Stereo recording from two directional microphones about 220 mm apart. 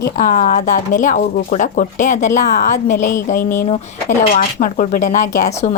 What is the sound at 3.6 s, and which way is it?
A woman's voice, 30° left (ahead or behind).